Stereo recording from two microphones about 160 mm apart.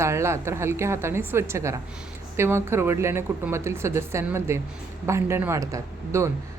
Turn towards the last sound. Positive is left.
turn(degrees=-20)  # may be behind; listen again after turning